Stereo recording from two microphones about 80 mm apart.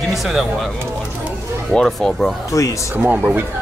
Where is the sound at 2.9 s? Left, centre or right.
Right.